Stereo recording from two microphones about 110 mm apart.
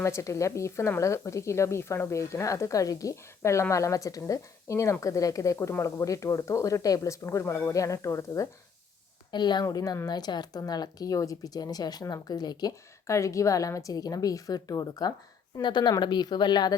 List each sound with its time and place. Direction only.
0.0 s speech: 25° left (ahead or behind)
9.3 s a woman's voice: 40° left (ahead or behind)